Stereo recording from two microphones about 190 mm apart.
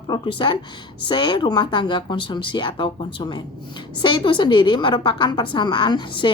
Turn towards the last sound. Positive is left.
turn(degrees=25)  # may be behind; listen again after turning